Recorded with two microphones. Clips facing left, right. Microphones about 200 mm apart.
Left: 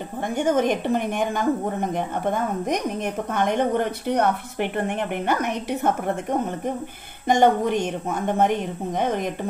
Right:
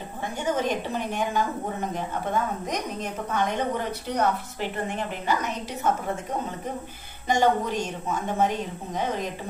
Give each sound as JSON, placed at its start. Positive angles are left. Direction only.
{"t": 0.4, "sound": "a woman's voice", "side_deg": 55}
{"t": 2.6, "sound": "a woman's voice", "side_deg": 55}
{"t": 7.2, "sound": "a woman's voice", "side_deg": 55}